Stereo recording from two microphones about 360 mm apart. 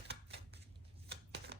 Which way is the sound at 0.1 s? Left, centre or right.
Right.